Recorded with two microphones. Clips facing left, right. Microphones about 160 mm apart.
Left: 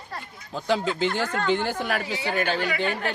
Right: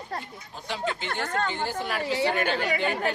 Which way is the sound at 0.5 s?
90° left.